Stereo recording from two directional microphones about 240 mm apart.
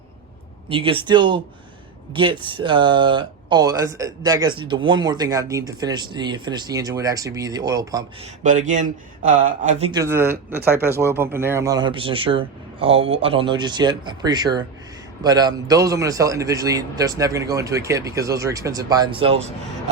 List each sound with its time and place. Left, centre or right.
0.7 s a man's voice: right
8.2 s speech: right
9.9 s a man's voice: centre